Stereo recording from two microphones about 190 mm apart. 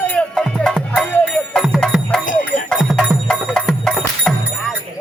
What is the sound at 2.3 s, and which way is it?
Music, 45° left (ahead or behind).